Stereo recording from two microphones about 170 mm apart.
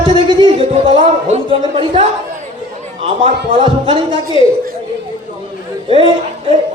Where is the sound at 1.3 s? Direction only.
30° right (ahead or behind).